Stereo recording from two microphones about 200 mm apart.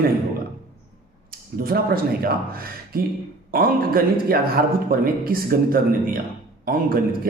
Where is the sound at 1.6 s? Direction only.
50° right (ahead or behind).